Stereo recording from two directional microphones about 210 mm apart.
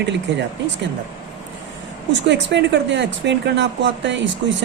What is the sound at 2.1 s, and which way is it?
Speech, 55° right (ahead or behind).